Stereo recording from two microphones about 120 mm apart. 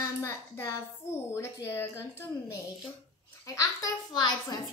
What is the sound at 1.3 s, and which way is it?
Speech, 20° left (ahead or behind).